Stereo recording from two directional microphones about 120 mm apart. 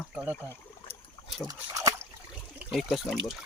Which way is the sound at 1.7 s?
25° right (ahead or behind).